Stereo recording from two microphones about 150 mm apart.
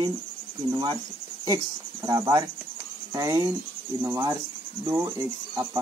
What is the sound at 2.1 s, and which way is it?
Speech, 25° right (ahead or behind).